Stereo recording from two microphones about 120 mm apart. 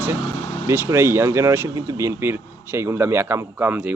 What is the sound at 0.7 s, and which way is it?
Speech, 20° right (ahead or behind).